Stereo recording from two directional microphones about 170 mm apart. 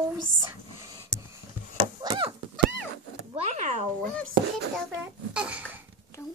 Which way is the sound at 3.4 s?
40° right (ahead or behind).